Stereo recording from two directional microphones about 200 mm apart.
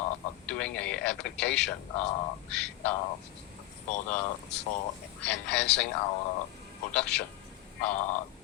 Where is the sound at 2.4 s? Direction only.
5° left (ahead or behind).